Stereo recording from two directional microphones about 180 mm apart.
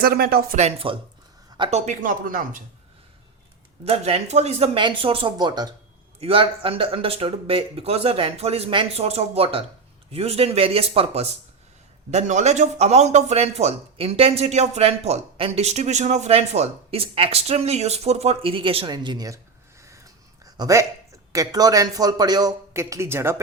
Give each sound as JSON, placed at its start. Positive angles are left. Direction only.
{"t": 0.0, "sound": "speech", "side_deg": -55}
{"t": 0.5, "sound": "a man's voice", "side_deg": -35}
{"t": 1.8, "sound": "speech", "side_deg": -45}
{"t": 3.8, "sound": "a man's voice", "side_deg": -35}
{"t": 19.8, "sound": "a sound", "side_deg": -15}
{"t": 21.3, "sound": "a man's voice", "side_deg": -20}